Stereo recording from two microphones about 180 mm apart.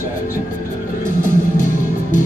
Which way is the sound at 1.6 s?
45° left (ahead or behind).